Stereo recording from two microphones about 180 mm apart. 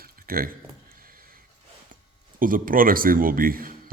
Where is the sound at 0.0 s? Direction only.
55° right (ahead or behind).